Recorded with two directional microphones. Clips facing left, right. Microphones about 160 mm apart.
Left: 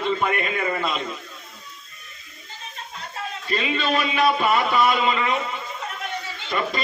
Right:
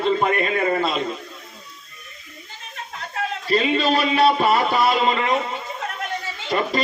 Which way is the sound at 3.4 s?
35° right (ahead or behind).